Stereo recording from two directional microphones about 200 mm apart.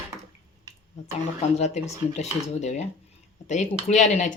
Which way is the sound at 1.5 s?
35° left (ahead or behind).